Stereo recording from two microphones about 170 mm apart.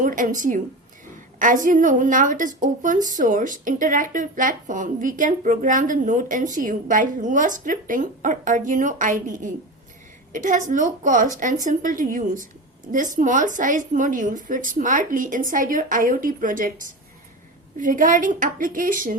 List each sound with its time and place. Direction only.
0.0 s a woman's voice: 50° right (ahead or behind)